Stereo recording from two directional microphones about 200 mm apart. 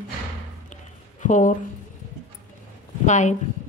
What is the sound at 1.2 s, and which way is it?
Speech, 40° left (ahead or behind).